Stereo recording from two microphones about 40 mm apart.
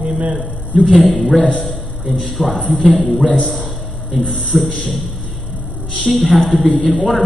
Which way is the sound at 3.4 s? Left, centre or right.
Centre.